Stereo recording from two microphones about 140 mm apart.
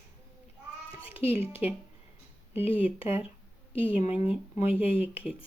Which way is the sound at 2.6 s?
40° left (ahead or behind).